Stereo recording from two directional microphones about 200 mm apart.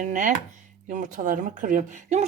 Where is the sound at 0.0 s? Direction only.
40° right (ahead or behind).